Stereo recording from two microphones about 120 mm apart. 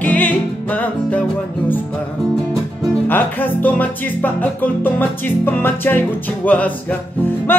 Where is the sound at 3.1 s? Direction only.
15° left (ahead or behind).